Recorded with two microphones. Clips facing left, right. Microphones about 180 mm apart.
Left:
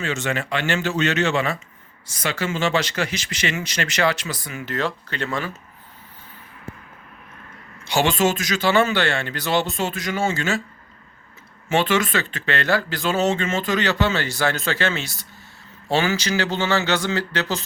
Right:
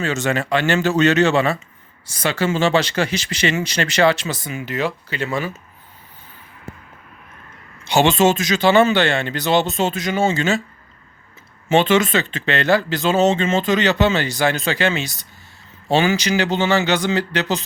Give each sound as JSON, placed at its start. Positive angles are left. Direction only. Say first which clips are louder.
{"t": 0.0, "sound": "speech", "louder": "right 4 dB", "side_deg": -40}
{"t": 4.5, "sound": "speech", "louder": "right 2 dB", "side_deg": -10}
{"t": 7.9, "sound": "speech", "louder": "right 5 dB", "side_deg": -25}
{"t": 11.7, "sound": "speech", "louder": "right 5 dB", "side_deg": -20}